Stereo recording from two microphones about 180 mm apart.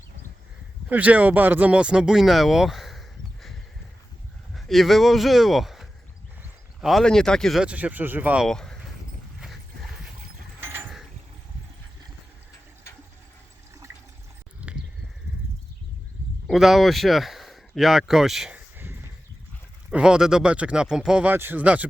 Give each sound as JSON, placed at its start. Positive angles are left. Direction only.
{"t": 0.9, "sound": "speech", "side_deg": -10}
{"t": 8.4, "sound": "speech", "side_deg": 5}
{"t": 10.6, "sound": "mechanisms", "side_deg": -15}
{"t": 16.5, "sound": "speech", "side_deg": 0}